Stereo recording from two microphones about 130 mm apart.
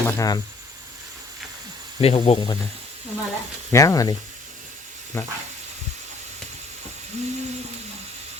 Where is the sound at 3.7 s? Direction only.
25° left (ahead or behind).